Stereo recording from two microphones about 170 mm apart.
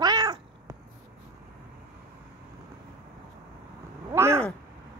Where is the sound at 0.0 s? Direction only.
25° right (ahead or behind).